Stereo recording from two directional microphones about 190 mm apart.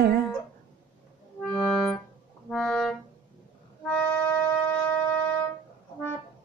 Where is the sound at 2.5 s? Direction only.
Centre (ahead or behind).